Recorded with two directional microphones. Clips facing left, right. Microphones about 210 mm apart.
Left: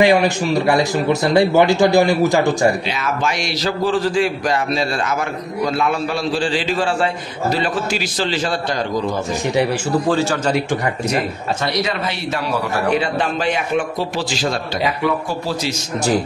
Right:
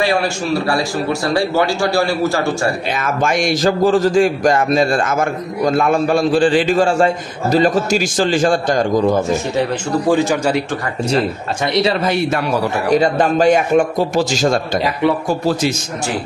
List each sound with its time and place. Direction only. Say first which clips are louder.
0.0 s speech: left 3 dB; 15° left (ahead or behind)
2.9 s a man's voice: right 3 dB; 50° right (ahead or behind)
10.0 s a man's voice: right 6 dB; 15° right (ahead or behind)
11.6 s speech: right 6 dB; 30° right (ahead or behind)
12.0 s a man's voice: right 6 dB; 45° right (ahead or behind)